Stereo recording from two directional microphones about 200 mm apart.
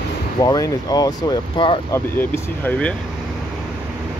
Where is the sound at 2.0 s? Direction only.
10° left (ahead or behind).